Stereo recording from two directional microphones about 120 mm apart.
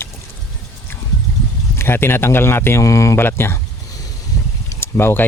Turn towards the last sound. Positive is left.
turn(degrees=20)  # may be behind; listen again after turning